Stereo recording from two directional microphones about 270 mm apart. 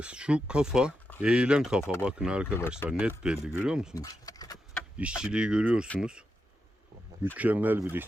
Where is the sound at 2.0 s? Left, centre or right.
Centre.